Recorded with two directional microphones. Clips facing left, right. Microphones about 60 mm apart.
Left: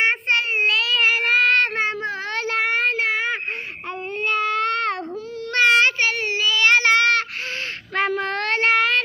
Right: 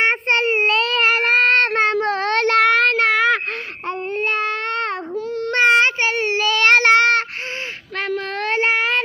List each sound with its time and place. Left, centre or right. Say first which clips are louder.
0.0 s child singing: right 3 dB; right
0.5 s child singing: right 3 dB; right
0.8 s child singing: right 2 dB; right
4.3 s a sound: left 4 dB; right
5.5 s child singing: right 2 dB; right
6.5 s child singing: right 3 dB; right
7.9 s a sound: left 2 dB; centre
8.4 s child singing: right 1 dB; centre